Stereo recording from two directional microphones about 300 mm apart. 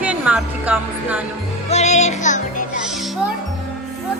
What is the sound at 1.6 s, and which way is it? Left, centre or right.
Speech, left.